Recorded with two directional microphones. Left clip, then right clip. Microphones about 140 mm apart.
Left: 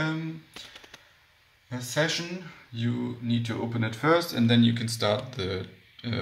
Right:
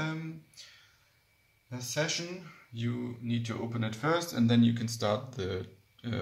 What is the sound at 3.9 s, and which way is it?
Speech, 15° right (ahead or behind).